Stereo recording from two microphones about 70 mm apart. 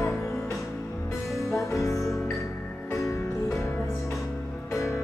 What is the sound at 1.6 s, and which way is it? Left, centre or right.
Music, left.